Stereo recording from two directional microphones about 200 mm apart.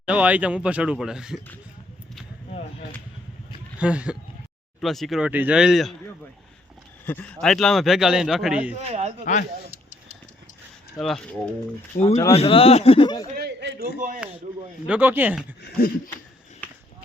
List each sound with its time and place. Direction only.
0.0 s speech: 5° right (ahead or behind)
3.8 s speech: 5° right (ahead or behind)
7.0 s speech: 10° left (ahead or behind)
8.8 s speech: 30° right (ahead or behind)
9.2 s speech: 40° left (ahead or behind)
11.0 s speech: 5° left (ahead or behind)
11.9 s speech: 30° left (ahead or behind)
13.3 s a sound: 55° right (ahead or behind)
14.2 s speech: 5° right (ahead or behind)
15.8 s a sound: 50° left (ahead or behind)